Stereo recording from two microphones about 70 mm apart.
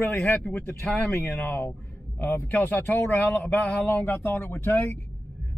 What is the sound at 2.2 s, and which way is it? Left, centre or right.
A man's voice, left.